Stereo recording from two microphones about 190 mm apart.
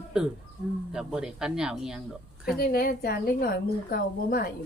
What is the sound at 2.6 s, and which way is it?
A woman's voice, 50° left (ahead or behind).